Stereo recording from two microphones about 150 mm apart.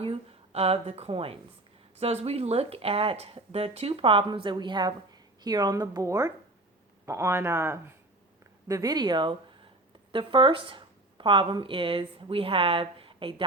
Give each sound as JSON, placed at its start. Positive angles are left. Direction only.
{"t": 0.0, "sound": "a woman's voice", "side_deg": -40}